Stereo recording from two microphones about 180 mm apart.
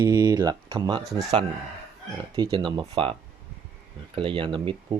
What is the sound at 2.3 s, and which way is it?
Speech, 30° right (ahead or behind).